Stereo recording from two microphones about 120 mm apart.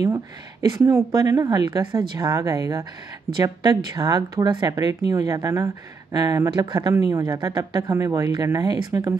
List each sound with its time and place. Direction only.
0.0 s speech: 30° right (ahead or behind)